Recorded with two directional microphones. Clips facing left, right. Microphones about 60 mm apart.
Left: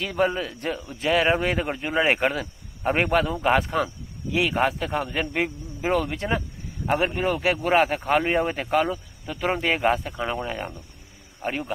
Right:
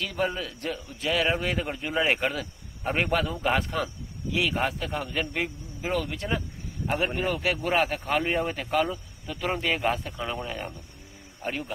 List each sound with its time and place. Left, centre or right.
0.0 s speech: left